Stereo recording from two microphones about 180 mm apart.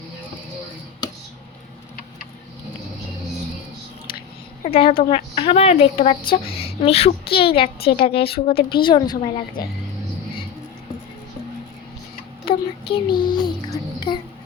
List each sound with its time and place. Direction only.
4.6 s a woman's voice: 35° left (ahead or behind)
12.5 s a sound: 30° left (ahead or behind)
13.1 s child singing: 25° left (ahead or behind)